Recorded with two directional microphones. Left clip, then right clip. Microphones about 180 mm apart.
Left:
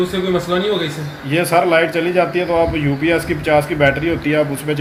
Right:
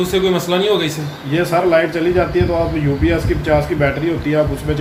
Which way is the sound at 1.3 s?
35° left (ahead or behind).